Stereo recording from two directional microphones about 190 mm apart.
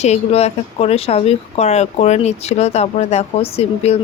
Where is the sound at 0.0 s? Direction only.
35° left (ahead or behind).